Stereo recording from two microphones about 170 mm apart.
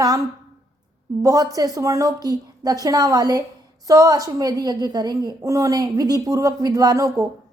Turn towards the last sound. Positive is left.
turn(degrees=-20)  # may be behind; listen again after turning